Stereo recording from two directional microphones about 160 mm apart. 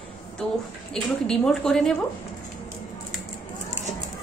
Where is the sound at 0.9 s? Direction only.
5° left (ahead or behind).